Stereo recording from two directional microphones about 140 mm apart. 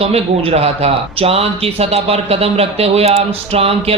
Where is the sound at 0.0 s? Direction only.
45° right (ahead or behind).